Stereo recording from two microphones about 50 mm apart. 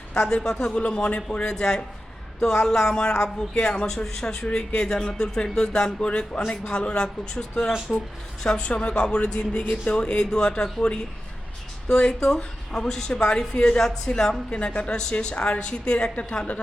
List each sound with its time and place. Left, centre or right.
0.4 s a woman's voice: centre